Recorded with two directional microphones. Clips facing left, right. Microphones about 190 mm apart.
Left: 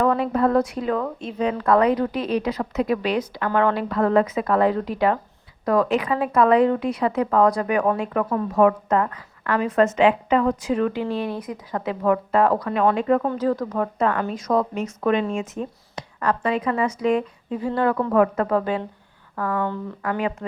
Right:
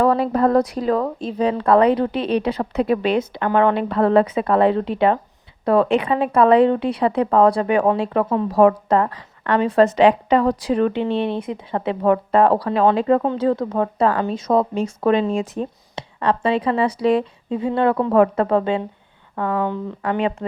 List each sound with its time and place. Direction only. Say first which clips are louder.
0.0 s speech: right 3 dB; 35° right (ahead or behind)